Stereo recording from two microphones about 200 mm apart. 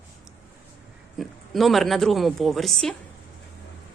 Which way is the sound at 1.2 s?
Centre (ahead or behind).